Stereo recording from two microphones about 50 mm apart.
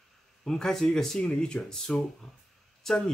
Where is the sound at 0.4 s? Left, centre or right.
Centre.